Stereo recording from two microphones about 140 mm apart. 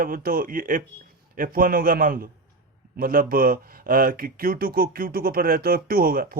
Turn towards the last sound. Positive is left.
turn(degrees=-90)